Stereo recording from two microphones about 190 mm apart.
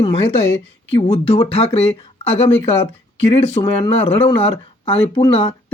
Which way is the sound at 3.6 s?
25° left (ahead or behind).